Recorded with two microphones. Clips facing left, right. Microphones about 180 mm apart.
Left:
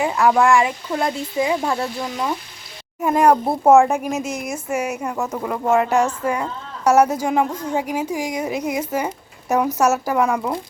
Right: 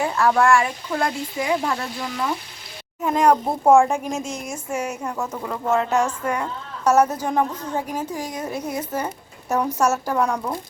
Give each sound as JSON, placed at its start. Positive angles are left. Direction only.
{"t": 0.0, "sound": "speech", "side_deg": 15}
{"t": 3.0, "sound": "a woman's voice", "side_deg": 5}